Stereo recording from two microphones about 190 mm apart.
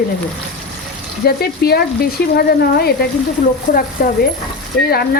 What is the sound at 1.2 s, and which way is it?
Speech, 55° left (ahead or behind).